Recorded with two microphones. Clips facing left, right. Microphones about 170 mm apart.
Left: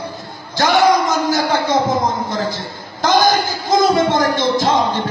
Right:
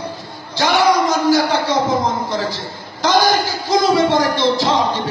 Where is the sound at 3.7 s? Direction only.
50° left (ahead or behind).